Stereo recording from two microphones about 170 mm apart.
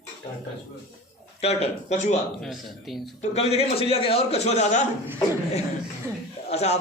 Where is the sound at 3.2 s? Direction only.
40° left (ahead or behind).